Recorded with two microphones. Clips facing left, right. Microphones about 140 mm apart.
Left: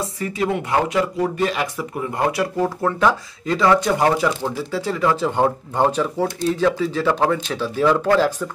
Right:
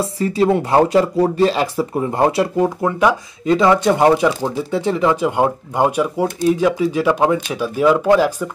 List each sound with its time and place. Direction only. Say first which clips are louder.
0.0 s speech: right 7 dB; 30° right (ahead or behind)
2.6 s speech: right 2 dB; 15° right (ahead or behind)